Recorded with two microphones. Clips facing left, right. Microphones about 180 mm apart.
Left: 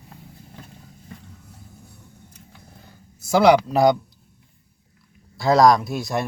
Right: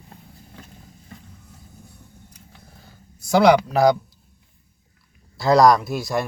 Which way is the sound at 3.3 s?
5° left (ahead or behind).